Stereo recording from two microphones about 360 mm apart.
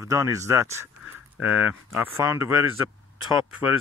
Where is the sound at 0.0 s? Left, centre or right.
Centre.